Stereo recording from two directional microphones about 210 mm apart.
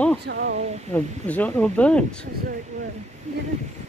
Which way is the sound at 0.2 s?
55° right (ahead or behind).